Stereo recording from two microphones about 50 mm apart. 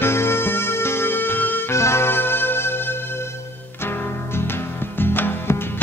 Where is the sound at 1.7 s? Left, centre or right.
Left.